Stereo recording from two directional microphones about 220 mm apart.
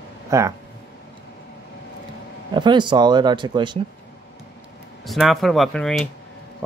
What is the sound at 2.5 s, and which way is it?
Speech, 20° right (ahead or behind).